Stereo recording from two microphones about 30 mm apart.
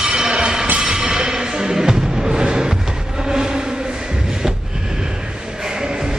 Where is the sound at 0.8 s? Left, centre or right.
Right.